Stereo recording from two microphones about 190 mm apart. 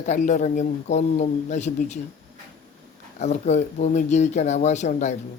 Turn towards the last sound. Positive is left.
turn(degrees=40)  # may be behind; listen again after turning